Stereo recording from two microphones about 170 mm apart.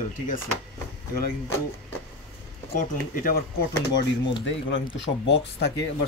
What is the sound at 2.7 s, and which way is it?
Speech, 55° left (ahead or behind).